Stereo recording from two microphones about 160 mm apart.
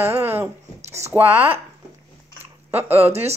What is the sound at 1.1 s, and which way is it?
Speech, 10° right (ahead or behind).